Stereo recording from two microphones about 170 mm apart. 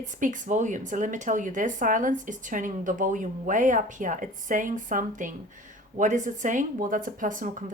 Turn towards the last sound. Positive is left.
turn(degrees=-50)  # may be behind; listen again after turning